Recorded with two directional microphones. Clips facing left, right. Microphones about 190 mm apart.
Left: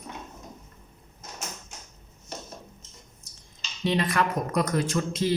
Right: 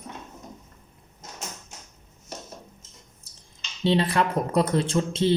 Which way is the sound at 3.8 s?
30° right (ahead or behind).